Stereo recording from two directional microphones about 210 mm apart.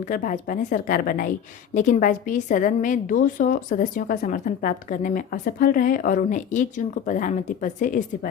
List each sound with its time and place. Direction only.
0.0 s a woman's voice: 40° left (ahead or behind)